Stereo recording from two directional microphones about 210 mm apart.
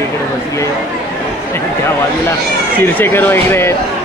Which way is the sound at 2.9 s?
10° left (ahead or behind).